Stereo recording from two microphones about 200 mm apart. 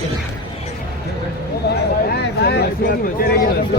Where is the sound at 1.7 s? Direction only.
55° left (ahead or behind).